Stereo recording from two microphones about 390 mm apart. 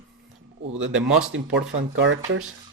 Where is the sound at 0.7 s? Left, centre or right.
Right.